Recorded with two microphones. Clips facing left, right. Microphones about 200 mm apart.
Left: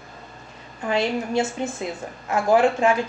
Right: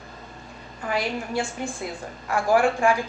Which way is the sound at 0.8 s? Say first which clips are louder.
Left 4 dB; 25° left (ahead or behind).